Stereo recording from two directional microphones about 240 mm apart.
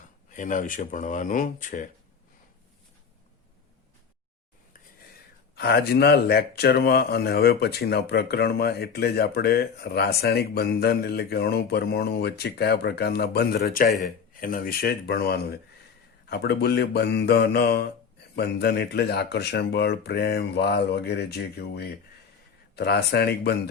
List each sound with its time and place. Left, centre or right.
0.3 s speech: left
5.5 s speech: left